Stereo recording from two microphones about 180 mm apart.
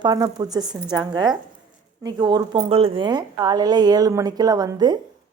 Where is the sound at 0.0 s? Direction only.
20° right (ahead or behind).